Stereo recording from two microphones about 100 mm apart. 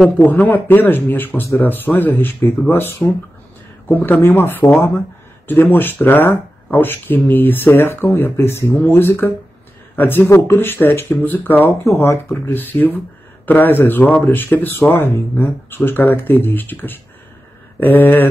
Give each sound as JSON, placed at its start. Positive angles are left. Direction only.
{"t": 0.2, "sound": "speech", "side_deg": 20}
{"t": 11.8, "sound": "speech", "side_deg": 30}